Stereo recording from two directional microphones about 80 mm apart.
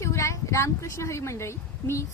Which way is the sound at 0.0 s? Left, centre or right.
Left.